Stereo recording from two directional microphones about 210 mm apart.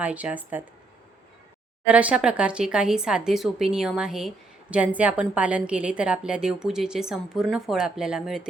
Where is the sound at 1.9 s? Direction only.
5° right (ahead or behind).